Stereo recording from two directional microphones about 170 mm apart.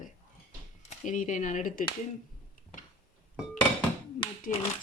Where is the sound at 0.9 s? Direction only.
50° left (ahead or behind).